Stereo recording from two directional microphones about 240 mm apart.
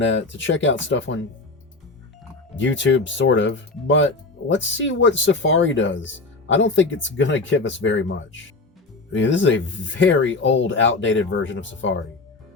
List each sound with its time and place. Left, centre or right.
0.0 s speech: left
2.6 s speech: left